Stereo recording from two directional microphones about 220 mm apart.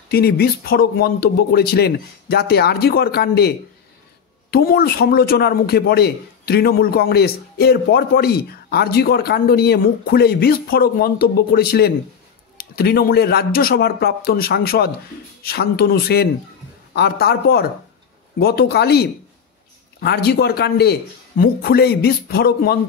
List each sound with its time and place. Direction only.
0.1 s a man's voice: 45° left (ahead or behind)